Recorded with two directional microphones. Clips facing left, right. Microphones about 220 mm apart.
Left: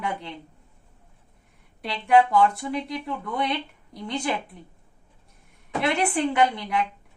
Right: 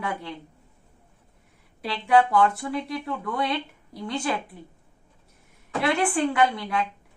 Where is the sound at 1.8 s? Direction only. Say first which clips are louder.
Left 1 dB; 20° left (ahead or behind).